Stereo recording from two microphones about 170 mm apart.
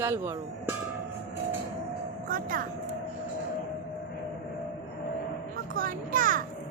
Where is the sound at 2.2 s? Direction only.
55° right (ahead or behind).